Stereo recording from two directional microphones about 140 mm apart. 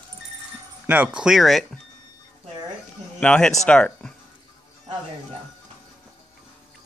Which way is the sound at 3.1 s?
10° left (ahead or behind).